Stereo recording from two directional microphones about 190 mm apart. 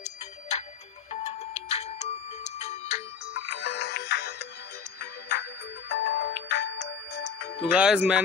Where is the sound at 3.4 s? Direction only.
65° left (ahead or behind).